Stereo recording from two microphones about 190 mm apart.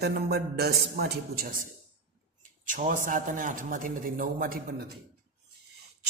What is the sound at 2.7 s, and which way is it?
A man's voice, 45° right (ahead or behind).